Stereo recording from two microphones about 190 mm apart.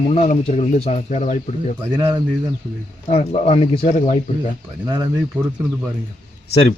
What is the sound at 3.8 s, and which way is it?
Speech, 40° left (ahead or behind).